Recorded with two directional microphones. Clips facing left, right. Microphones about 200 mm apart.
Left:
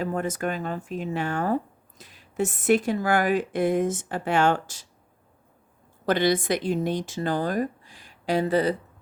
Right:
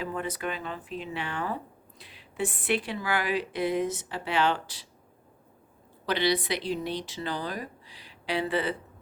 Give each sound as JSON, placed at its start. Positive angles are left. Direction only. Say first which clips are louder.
{"t": 0.0, "sound": "speech", "louder": "left 5 dB", "side_deg": 45}
{"t": 6.1, "sound": "speech", "louder": "left 5 dB", "side_deg": 50}